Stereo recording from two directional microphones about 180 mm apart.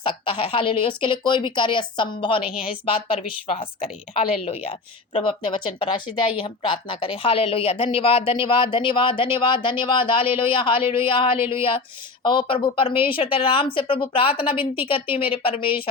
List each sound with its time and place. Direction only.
0.0 s a woman's voice: 30° left (ahead or behind)